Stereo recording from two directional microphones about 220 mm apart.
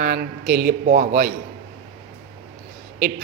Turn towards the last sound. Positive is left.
turn(degrees=-40)  # may be behind; listen again after turning